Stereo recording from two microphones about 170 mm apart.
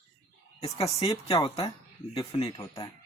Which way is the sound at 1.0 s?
35° left (ahead or behind).